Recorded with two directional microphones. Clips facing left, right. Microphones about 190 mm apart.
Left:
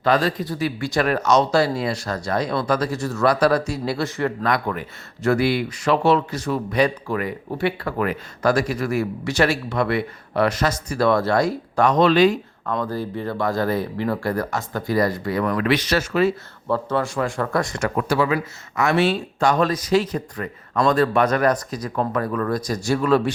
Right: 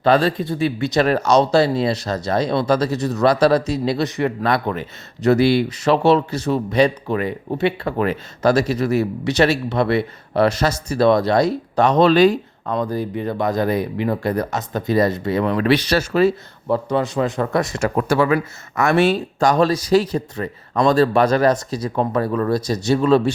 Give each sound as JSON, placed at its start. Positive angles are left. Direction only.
{"t": 0.0, "sound": "speech", "side_deg": -30}
{"t": 12.6, "sound": "speech", "side_deg": -15}
{"t": 16.6, "sound": "speech", "side_deg": -15}
{"t": 18.1, "sound": "speech", "side_deg": -55}